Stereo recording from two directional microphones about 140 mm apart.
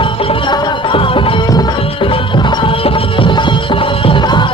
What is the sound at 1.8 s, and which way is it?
Music, 40° left (ahead or behind).